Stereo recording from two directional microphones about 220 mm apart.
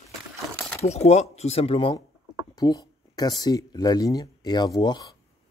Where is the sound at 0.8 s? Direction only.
30° left (ahead or behind).